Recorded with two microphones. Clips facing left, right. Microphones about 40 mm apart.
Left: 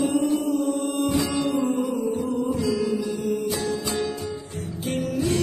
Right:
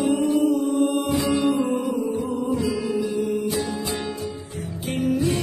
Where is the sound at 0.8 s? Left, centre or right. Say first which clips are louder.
Right 2 dB; centre.